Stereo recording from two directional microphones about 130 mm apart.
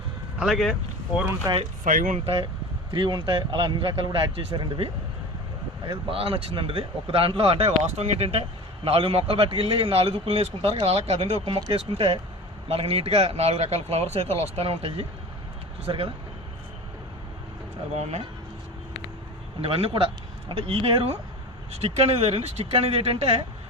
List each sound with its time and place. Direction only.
0.3 s speech: centre (ahead or behind)
1.2 s speech: 20° right (ahead or behind)
1.8 s speech: 90° right
2.2 s speech: 45° right (ahead or behind)
17.9 s speech: 55° right (ahead or behind)
19.6 s speech: 45° right (ahead or behind)